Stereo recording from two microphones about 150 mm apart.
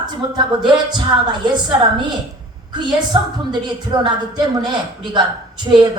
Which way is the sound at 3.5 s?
30° right (ahead or behind).